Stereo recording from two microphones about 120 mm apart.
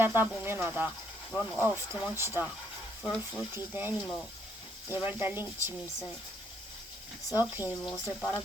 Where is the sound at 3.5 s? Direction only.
15° right (ahead or behind).